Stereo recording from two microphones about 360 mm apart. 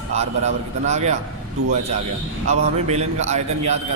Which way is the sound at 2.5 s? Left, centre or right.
Centre.